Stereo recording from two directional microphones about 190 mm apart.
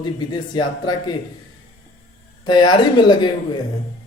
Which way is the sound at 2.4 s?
25° left (ahead or behind).